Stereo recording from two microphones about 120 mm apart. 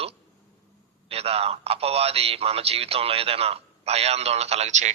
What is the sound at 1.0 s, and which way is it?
A man's voice, 55° right (ahead or behind).